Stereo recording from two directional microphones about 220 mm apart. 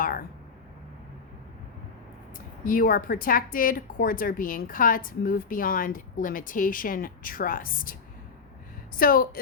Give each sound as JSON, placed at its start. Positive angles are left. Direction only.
{"t": 0.0, "sound": "a sound", "side_deg": 40}
{"t": 2.6, "sound": "speech", "side_deg": 40}
{"t": 9.0, "sound": "speech", "side_deg": 40}